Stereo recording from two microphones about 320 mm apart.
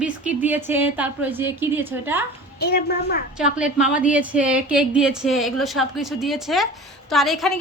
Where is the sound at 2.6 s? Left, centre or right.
Left.